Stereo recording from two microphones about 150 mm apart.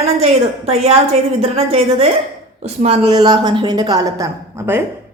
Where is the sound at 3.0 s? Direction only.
30° right (ahead or behind).